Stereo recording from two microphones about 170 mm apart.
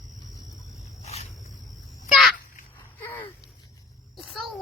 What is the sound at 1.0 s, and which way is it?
Wild animals, 40° left (ahead or behind).